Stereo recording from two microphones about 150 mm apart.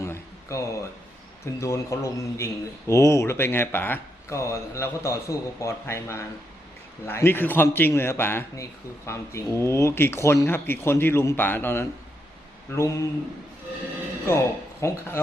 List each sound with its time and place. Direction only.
0.0 s a sound: 20° left (ahead or behind)
1.6 s a man's voice: 20° left (ahead or behind)
14.3 s speech: 20° left (ahead or behind)